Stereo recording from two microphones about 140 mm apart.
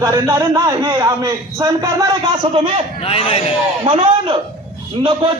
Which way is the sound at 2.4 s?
45° right (ahead or behind).